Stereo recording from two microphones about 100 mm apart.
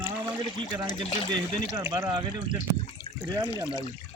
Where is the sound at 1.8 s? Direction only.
30° right (ahead or behind).